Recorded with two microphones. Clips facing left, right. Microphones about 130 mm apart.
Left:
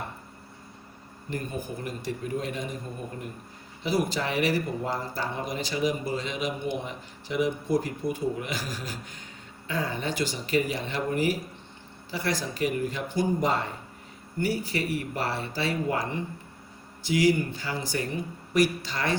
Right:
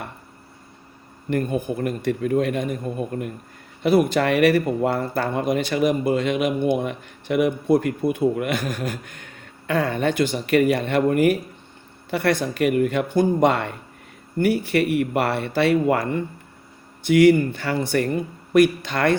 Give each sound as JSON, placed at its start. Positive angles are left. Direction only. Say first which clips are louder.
{"t": 1.3, "sound": "speech", "louder": "right 10 dB", "side_deg": -60}